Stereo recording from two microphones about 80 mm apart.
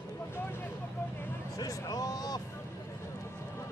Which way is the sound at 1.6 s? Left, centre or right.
Left.